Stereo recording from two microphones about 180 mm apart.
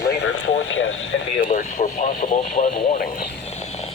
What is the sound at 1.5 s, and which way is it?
Speech, 40° left (ahead or behind).